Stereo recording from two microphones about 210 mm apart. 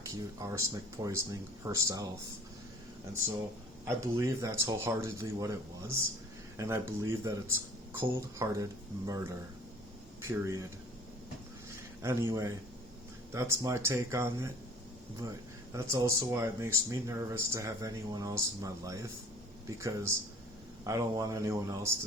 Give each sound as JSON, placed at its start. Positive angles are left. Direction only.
{"t": 0.0, "sound": "speech", "side_deg": -15}
{"t": 3.8, "sound": "speech", "side_deg": -15}
{"t": 12.0, "sound": "speech", "side_deg": -15}
{"t": 15.7, "sound": "speech", "side_deg": -15}